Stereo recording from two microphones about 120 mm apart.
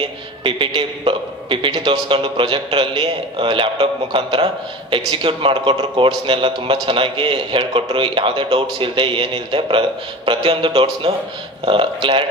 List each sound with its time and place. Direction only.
0.4 s a man's voice: 45° right (ahead or behind)